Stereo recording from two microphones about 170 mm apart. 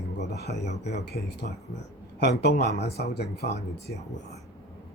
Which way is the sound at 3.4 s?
40° left (ahead or behind).